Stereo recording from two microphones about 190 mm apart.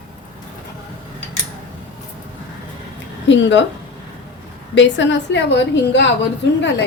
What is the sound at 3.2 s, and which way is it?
Speech, 75° left (ahead or behind).